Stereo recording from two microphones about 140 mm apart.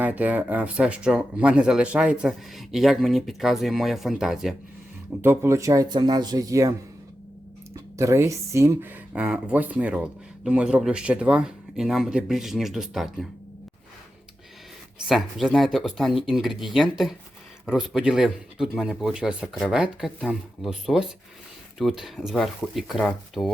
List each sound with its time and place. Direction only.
0.0 s speech: 10° right (ahead or behind)
5.2 s speech: 15° right (ahead or behind)
7.9 s speech: 20° right (ahead or behind); by 13.2 s centre (ahead or behind)
15.0 s speech: centre (ahead or behind)